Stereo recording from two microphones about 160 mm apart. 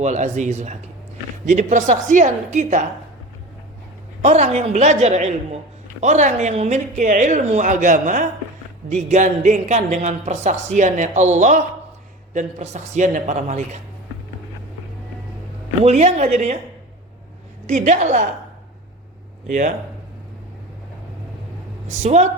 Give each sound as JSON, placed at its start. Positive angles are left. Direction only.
{"t": 0.0, "sound": "speech", "side_deg": -45}
{"t": 4.2, "sound": "speech", "side_deg": -45}
{"t": 15.8, "sound": "speech", "side_deg": -45}
{"t": 17.7, "sound": "speech", "side_deg": -50}
{"t": 21.8, "sound": "speech", "side_deg": -45}